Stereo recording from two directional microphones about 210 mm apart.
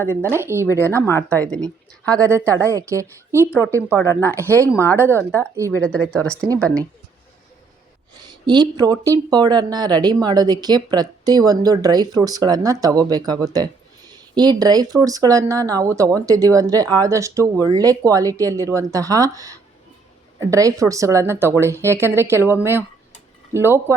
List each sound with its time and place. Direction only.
0.0 s speech: 10° left (ahead or behind)
0.3 s speech: 10° right (ahead or behind)
0.7 s speech: 10° left (ahead or behind)
2.4 s speech: 15° right (ahead or behind)
3.5 s speech: 10° left (ahead or behind)
8.1 s a woman's voice: 20° right (ahead or behind)